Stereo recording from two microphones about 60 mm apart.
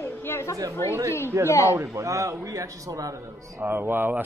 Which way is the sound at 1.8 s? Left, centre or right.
Right.